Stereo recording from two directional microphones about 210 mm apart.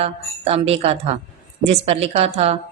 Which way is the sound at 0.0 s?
30° right (ahead or behind).